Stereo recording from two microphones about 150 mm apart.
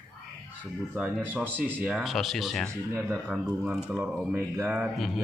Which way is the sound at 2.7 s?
15° right (ahead or behind).